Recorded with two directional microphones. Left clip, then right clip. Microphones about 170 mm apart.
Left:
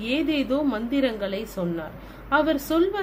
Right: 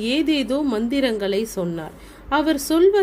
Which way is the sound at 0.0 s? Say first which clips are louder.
Right 4 dB; 55° right (ahead or behind).